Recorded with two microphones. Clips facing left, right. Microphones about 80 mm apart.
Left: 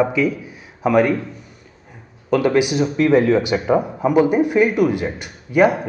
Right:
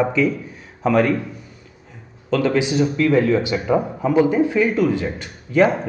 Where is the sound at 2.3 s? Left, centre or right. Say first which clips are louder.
Left 2 dB; centre.